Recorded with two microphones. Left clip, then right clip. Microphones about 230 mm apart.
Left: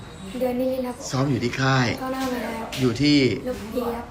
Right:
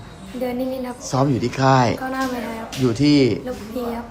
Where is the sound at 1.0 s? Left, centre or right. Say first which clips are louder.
Right 9 dB; centre.